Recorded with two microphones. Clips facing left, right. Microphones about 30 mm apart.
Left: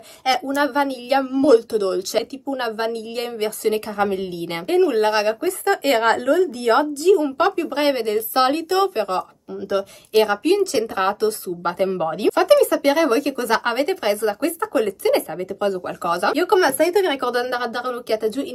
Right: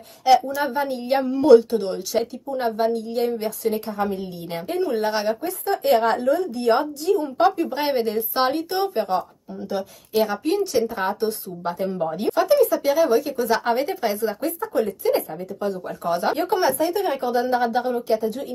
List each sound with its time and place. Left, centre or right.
0.2 s speech: left
1.7 s speech: left
3.6 s speech: left
5.9 s speech: left
7.3 s speech: left
8.1 s speech: left
10.2 s speech: left
12.7 s speech: left
13.5 s speech: left
14.4 s speech: left